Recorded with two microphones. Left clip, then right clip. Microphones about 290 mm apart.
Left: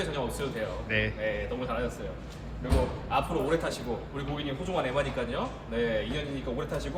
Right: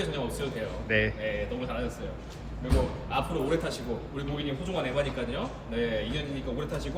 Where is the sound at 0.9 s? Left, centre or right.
Centre.